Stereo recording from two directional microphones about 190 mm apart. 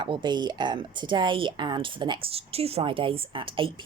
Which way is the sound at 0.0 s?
25° right (ahead or behind).